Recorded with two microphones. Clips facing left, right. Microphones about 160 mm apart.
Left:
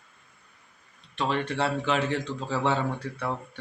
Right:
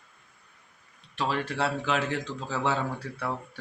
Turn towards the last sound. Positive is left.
turn(degrees=-5)  # may be behind; listen again after turning